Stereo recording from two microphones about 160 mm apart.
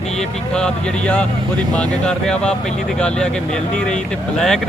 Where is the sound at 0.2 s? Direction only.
5° left (ahead or behind).